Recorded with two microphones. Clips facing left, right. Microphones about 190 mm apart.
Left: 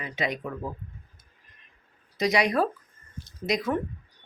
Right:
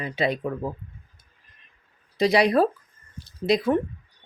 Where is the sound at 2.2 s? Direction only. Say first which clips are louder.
Right 5 dB; 30° right (ahead or behind).